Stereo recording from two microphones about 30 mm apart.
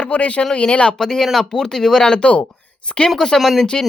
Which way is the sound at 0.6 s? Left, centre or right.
Left.